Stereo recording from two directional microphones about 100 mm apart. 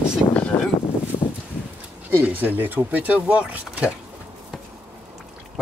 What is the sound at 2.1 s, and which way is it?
Speech, 20° right (ahead or behind).